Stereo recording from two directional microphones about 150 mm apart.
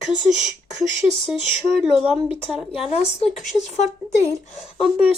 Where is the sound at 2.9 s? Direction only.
45° left (ahead or behind).